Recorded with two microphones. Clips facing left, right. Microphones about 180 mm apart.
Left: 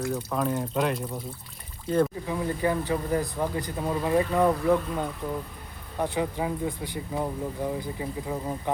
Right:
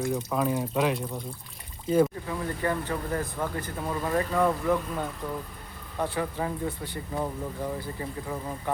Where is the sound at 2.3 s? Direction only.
15° left (ahead or behind).